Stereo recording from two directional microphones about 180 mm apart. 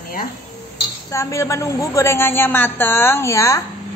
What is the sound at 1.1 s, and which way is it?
A woman's voice, 15° left (ahead or behind).